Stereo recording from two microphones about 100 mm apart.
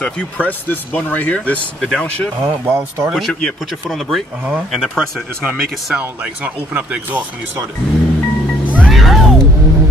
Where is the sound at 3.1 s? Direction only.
Centre (ahead or behind).